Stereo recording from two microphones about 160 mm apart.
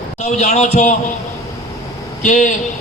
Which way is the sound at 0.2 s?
45° left (ahead or behind).